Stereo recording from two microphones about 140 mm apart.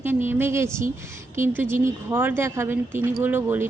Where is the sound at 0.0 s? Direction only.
15° right (ahead or behind).